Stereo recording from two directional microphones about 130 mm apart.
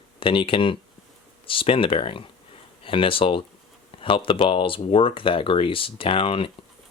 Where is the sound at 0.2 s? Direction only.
45° left (ahead or behind).